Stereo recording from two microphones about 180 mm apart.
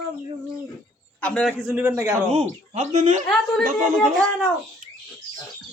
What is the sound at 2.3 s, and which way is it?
Speech, 40° right (ahead or behind).